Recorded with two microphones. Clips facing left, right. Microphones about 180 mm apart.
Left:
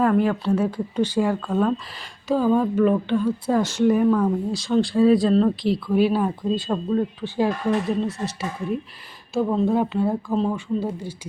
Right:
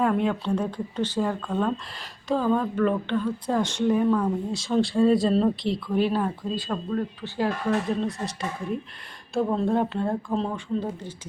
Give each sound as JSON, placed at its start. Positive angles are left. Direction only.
{"t": 0.0, "sound": "speech", "side_deg": 0}
{"t": 6.6, "sound": "speech", "side_deg": 20}